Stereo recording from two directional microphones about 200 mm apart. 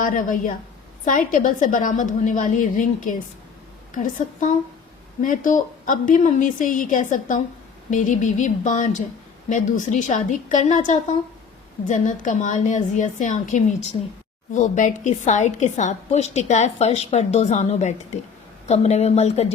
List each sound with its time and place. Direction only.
0.0 s a woman's voice: 40° left (ahead or behind)